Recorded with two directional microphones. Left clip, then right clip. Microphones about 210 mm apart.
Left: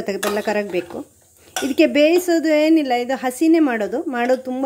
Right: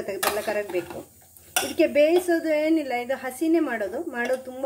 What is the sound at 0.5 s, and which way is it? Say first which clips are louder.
A woman's voice: left 6 dB; 50° left (ahead or behind).